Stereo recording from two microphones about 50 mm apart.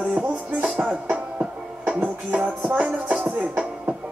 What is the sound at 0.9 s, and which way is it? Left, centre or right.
Music, centre.